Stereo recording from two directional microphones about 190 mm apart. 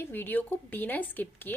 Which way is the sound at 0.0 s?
10° left (ahead or behind).